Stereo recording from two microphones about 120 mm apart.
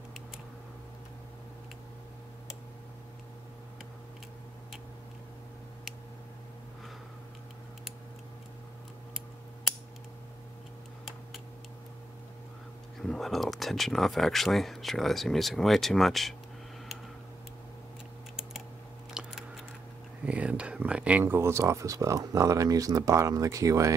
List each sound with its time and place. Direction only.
13.0 s speech: centre (ahead or behind)
19.1 s biting: 5° right (ahead or behind)
20.2 s speech: 10° right (ahead or behind); by 23.9 s 30° right (ahead or behind)